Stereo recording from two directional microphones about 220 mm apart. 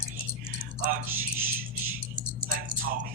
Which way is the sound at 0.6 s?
35° right (ahead or behind).